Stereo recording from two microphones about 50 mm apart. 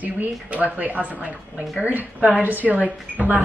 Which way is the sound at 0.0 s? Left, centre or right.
Right.